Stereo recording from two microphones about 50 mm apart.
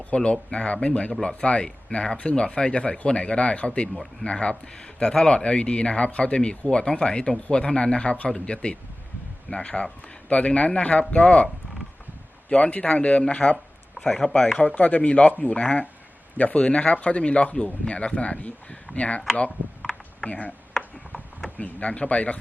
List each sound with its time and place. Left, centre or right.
0.0 s speech: left
12.5 s speech: left
14.0 s speech: centre
14.8 s speech: left
20.2 s speech: left
21.6 s speech: left